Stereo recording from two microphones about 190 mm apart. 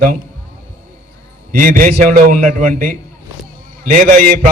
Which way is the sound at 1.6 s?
45° right (ahead or behind).